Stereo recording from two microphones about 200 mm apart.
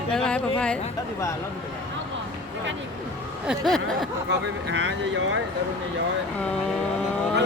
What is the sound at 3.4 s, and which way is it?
Speech, centre (ahead or behind).